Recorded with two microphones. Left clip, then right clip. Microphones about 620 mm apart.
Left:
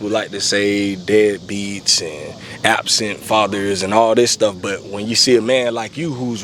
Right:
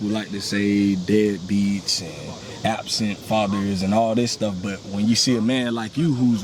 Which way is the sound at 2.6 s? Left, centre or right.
Left.